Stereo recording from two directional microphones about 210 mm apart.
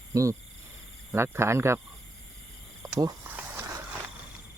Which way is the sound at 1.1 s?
10° right (ahead or behind).